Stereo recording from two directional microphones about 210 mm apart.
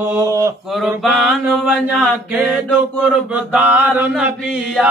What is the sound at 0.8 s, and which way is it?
Mantra, 5° right (ahead or behind).